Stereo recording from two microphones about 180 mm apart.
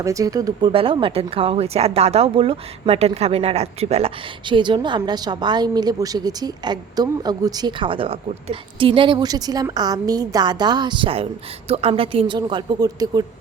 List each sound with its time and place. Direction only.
0.0 s speech: 20° right (ahead or behind)